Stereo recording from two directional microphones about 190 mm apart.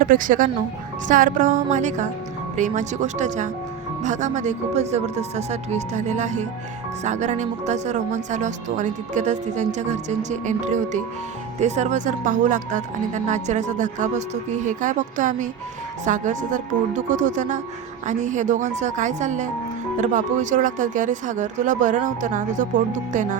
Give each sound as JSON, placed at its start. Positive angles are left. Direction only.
{"t": 0.0, "sound": "speech", "side_deg": -45}